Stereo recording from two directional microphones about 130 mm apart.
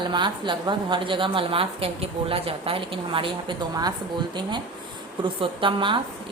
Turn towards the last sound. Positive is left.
turn(degrees=-40)  # may be behind; listen again after turning